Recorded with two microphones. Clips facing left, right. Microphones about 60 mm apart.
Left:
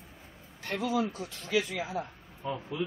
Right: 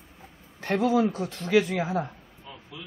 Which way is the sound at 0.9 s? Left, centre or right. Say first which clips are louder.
Right 7 dB; right.